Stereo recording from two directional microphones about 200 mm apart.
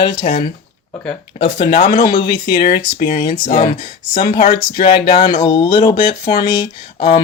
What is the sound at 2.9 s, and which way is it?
Speech, 25° left (ahead or behind).